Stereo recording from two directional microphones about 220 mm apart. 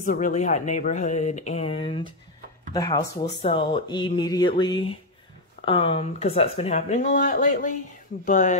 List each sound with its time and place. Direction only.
0.0 s speech: 35° left (ahead or behind)